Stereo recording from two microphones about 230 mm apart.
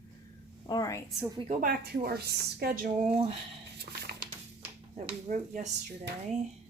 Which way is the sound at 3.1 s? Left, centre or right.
Right.